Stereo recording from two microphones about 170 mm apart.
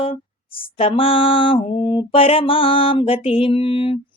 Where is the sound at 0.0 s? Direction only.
30° left (ahead or behind).